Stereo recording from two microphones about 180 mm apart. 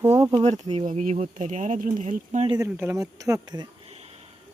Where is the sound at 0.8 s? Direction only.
45° right (ahead or behind).